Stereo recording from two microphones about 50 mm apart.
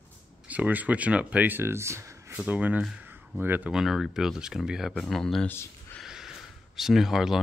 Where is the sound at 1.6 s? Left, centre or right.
Right.